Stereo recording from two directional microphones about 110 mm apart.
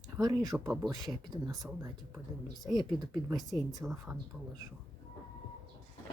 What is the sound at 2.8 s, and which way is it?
Speech, 40° right (ahead or behind).